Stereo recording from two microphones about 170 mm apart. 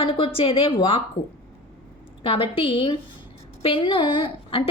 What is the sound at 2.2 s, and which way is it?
A woman's voice, 30° left (ahead or behind).